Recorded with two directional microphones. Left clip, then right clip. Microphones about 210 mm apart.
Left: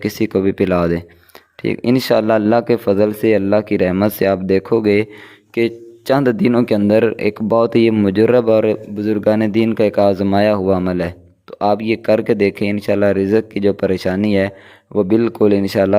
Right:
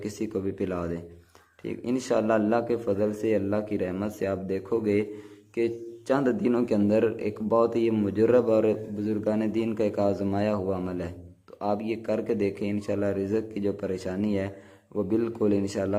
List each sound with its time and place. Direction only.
0.0 s speech: 35° left (ahead or behind)